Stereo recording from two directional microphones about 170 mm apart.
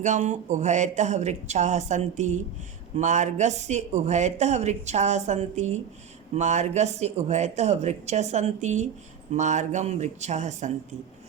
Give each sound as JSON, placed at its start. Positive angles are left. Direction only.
{"t": 0.0, "sound": "speech", "side_deg": -45}